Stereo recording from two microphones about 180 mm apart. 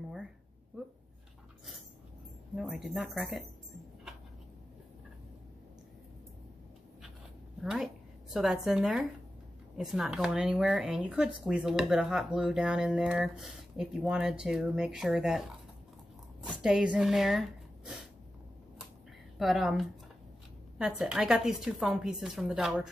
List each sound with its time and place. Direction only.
2.5 s speech: centre (ahead or behind)
7.6 s speech: centre (ahead or behind)
16.4 s speech: 5° right (ahead or behind)
19.3 s speech: centre (ahead or behind)